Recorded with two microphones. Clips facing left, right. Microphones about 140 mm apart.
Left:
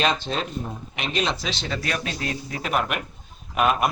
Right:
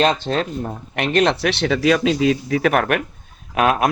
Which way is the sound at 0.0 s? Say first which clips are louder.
Right 6 dB; 45° right (ahead or behind).